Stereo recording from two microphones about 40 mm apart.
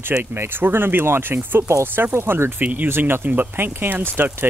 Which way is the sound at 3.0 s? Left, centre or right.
Right.